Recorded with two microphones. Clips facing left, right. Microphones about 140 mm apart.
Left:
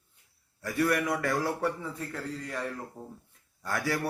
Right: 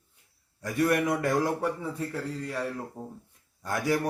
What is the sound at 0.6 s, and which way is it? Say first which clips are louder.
A man's voice: right 2 dB; 20° right (ahead or behind).